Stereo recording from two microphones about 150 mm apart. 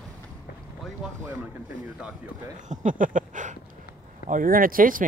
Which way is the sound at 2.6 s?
60° right (ahead or behind).